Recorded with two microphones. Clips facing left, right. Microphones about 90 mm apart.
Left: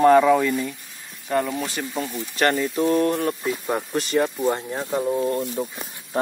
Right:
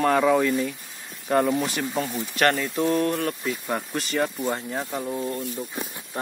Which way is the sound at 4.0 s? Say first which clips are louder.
Left 5 dB; 5° left (ahead or behind).